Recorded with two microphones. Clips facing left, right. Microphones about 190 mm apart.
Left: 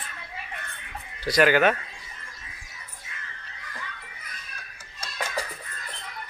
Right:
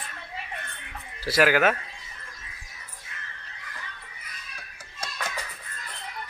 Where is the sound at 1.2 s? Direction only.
5° right (ahead or behind).